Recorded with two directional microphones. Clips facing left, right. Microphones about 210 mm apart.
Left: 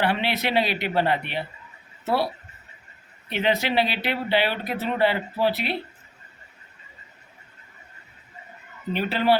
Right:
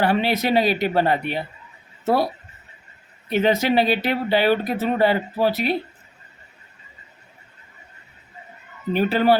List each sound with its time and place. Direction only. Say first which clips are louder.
0.0 s speech: right 4 dB; 40° right (ahead or behind)
8.9 s speech: right 4 dB; 45° right (ahead or behind)